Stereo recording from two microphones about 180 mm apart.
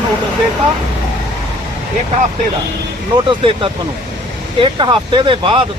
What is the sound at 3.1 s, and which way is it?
Speech, 30° right (ahead or behind).